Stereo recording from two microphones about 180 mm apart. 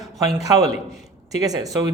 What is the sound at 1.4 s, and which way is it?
Speech, 20° right (ahead or behind).